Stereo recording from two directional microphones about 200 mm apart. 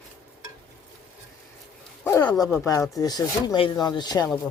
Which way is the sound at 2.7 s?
15° left (ahead or behind).